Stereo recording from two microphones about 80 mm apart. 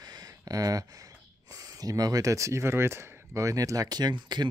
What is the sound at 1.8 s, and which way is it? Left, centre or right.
Speech, right.